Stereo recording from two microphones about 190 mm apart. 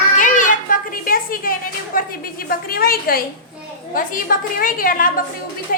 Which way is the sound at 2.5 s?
55° left (ahead or behind).